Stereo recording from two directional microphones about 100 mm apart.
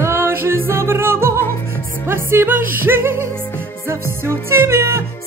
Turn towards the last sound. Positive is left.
turn(degrees=-25)  # may be behind; listen again after turning